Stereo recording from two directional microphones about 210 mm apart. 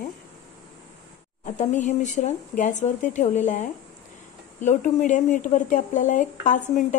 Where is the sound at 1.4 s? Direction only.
35° left (ahead or behind).